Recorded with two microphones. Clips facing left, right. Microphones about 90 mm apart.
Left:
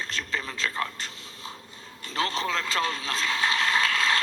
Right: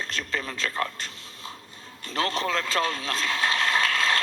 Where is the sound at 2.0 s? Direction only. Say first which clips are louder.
Right 1 dB; 40° right (ahead or behind).